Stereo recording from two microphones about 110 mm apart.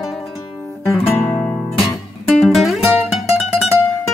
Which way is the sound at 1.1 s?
20° left (ahead or behind).